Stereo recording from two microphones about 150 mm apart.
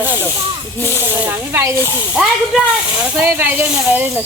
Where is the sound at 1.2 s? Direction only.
15° right (ahead or behind).